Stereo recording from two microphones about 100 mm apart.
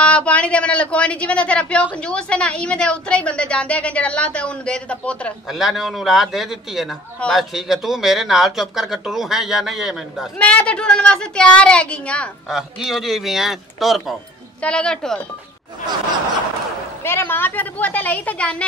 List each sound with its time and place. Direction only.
0.0 s a woman's voice: 10° left (ahead or behind)
5.5 s speech: centre (ahead or behind)
10.4 s a woman's voice: 10° left (ahead or behind)
12.4 s speech: 5° right (ahead or behind)
14.6 s a woman's voice: 10° left (ahead or behind)
17.0 s a woman's voice: 25° left (ahead or behind)